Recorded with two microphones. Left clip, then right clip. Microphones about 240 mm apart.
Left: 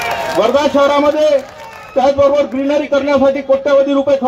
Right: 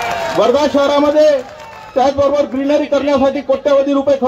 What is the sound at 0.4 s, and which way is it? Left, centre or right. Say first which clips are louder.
Speech: left 1 dB; right.